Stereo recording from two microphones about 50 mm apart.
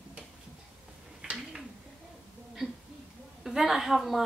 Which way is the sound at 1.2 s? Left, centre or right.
Centre.